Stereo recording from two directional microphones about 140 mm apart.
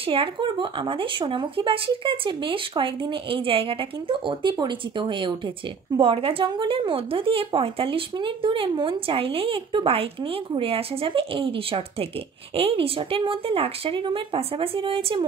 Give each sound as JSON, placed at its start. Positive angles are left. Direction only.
{"t": 0.0, "sound": "speech", "side_deg": -40}